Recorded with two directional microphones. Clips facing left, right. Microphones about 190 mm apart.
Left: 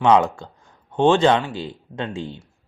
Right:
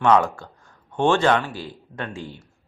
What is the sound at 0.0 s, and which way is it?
Speech, 20° left (ahead or behind).